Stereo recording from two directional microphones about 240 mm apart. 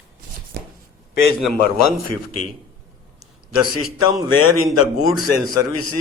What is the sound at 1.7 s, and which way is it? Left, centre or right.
Speech, left.